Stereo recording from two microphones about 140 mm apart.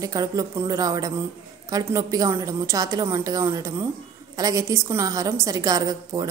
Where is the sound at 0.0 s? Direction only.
25° right (ahead or behind).